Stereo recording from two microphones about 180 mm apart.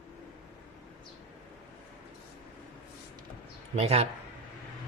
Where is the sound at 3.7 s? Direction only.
35° right (ahead or behind).